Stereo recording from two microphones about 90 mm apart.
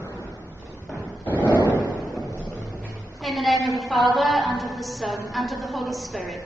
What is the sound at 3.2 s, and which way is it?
A woman's voice, centre (ahead or behind).